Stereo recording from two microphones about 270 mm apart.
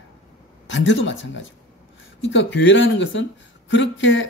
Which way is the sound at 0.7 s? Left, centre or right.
Left.